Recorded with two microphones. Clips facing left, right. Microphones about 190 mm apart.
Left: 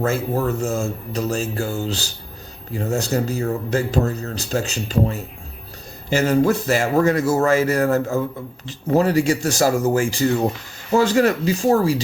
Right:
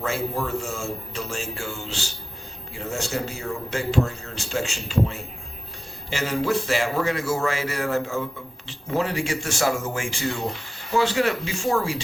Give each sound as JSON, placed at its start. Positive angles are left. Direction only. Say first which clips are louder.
{"t": 0.0, "sound": "speech", "louder": "left 6 dB", "side_deg": 45}